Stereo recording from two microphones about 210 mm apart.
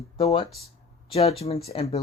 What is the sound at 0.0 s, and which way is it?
Speech, 30° left (ahead or behind).